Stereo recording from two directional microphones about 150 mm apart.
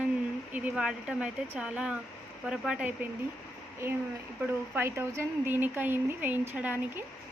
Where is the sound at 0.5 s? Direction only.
10° right (ahead or behind).